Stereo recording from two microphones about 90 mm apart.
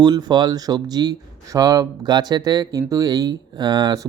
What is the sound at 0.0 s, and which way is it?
Speech, 50° right (ahead or behind).